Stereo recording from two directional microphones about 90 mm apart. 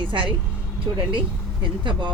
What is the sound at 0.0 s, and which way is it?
Speech, 70° right (ahead or behind).